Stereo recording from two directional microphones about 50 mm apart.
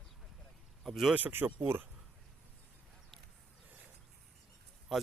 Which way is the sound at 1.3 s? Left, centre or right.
Right.